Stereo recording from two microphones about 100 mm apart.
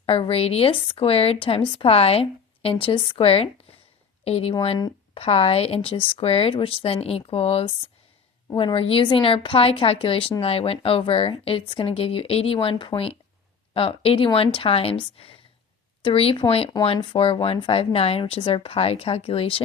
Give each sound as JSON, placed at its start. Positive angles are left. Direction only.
{"t": 0.0, "sound": "a woman's voice", "side_deg": 70}
{"t": 4.2, "sound": "a woman's voice", "side_deg": 90}
{"t": 8.5, "sound": "a woman's voice", "side_deg": 65}